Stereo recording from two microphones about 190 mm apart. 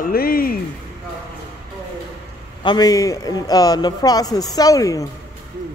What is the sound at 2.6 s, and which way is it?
A man's voice, 20° left (ahead or behind).